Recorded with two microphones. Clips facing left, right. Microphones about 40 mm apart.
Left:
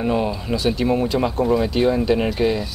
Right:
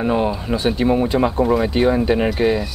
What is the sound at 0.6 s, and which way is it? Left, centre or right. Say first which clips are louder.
Speech: right 2 dB; right.